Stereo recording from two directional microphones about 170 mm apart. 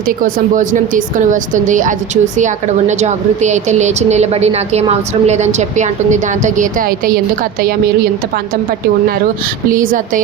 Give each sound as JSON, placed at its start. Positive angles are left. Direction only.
{"t": 0.3, "sound": "a woman's voice", "side_deg": -50}
{"t": 9.7, "sound": "a woman's voice", "side_deg": -55}